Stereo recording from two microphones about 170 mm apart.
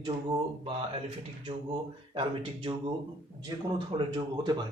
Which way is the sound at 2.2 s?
30° right (ahead or behind).